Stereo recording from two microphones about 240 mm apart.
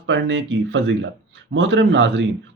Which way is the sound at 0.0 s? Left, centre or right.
Right.